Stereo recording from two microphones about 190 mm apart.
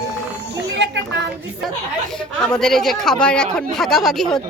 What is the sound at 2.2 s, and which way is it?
Speech, 5° left (ahead or behind).